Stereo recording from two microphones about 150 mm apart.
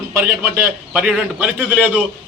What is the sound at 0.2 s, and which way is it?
A man's voice, 10° right (ahead or behind).